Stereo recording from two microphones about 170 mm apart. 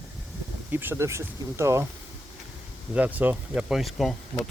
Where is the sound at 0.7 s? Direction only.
10° right (ahead or behind).